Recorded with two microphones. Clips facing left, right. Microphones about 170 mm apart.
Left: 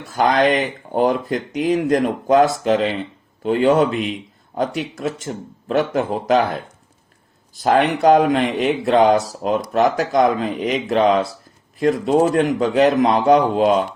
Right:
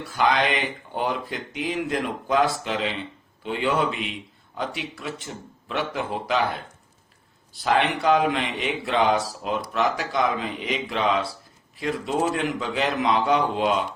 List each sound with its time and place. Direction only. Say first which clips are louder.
0.0 s speech: left 6 dB; 45° left (ahead or behind)